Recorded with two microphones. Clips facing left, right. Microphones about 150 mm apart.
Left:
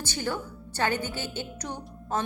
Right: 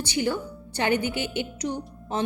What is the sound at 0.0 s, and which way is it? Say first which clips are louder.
A woman's voice: right 5 dB; 15° right (ahead or behind).